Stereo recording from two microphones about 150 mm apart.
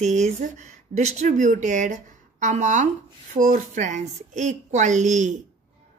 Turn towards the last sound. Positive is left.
turn(degrees=-55)  # may be behind; listen again after turning